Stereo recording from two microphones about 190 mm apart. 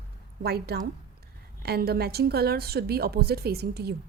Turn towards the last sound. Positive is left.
turn(degrees=-55)  # may be behind; listen again after turning